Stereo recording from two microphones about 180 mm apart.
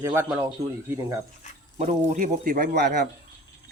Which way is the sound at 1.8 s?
40° right (ahead or behind).